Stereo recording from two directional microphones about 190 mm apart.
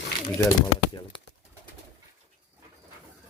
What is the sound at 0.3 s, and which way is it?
Speech, 15° left (ahead or behind).